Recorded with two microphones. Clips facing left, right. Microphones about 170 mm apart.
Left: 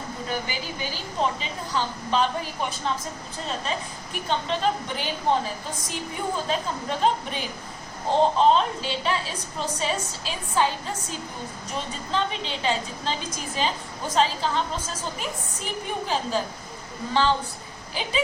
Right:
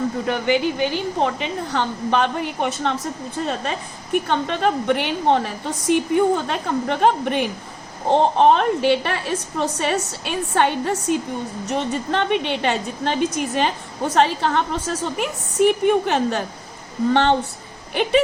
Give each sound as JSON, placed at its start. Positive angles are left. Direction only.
{"t": 0.3, "sound": "a woman's voice", "side_deg": -65}
{"t": 3.4, "sound": "a woman's voice", "side_deg": -60}